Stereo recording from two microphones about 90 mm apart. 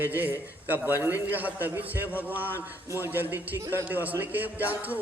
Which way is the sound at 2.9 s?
25° right (ahead or behind).